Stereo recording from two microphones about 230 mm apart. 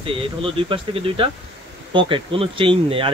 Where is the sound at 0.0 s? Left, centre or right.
Right.